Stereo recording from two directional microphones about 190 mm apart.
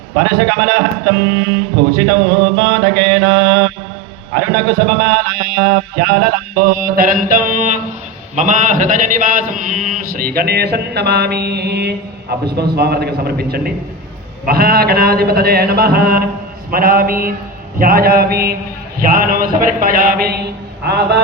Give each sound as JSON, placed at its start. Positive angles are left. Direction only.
{"t": 0.1, "sound": "a man's voice", "side_deg": -60}